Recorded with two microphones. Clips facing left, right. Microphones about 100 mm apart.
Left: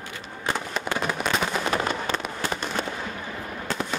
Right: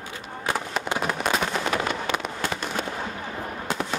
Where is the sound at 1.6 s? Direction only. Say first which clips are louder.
Even; 35° left (ahead or behind).